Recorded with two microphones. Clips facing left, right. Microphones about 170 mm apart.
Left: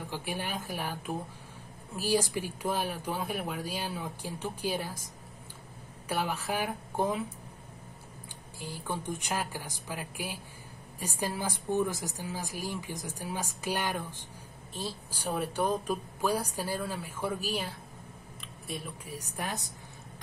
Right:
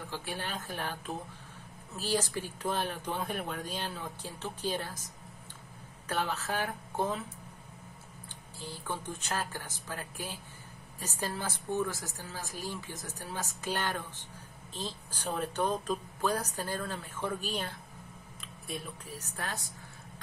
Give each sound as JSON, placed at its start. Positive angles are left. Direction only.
{"t": 0.1, "sound": "speech", "side_deg": 15}
{"t": 6.0, "sound": "speech", "side_deg": 10}
{"t": 8.5, "sound": "speech", "side_deg": 10}
{"t": 19.0, "sound": "speech", "side_deg": 15}